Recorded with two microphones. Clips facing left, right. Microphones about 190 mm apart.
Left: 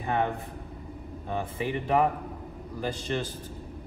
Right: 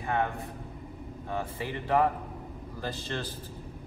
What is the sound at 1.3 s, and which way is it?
Speech, 15° left (ahead or behind).